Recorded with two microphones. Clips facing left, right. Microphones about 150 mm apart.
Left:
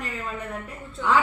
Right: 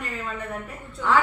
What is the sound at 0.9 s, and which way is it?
Speech, 20° left (ahead or behind).